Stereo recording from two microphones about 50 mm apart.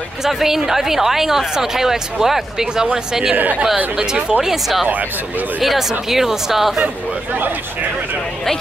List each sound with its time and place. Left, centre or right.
0.2 s a woman's voice: centre
3.3 s speech: right
3.7 s a woman's voice: centre